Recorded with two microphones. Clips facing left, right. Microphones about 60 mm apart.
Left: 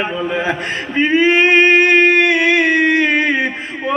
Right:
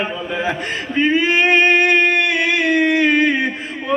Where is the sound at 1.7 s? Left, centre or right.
Centre.